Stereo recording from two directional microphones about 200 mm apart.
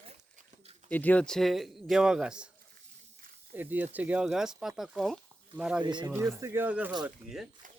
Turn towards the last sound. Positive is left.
turn(degrees=0)  # may be behind; listen again after turning